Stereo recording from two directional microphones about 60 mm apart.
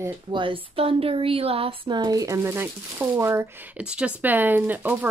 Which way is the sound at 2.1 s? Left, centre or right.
Right.